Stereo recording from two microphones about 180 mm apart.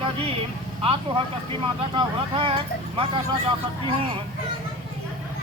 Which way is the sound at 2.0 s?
30° right (ahead or behind).